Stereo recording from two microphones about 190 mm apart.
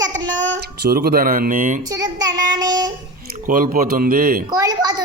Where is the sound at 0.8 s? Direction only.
55° right (ahead or behind).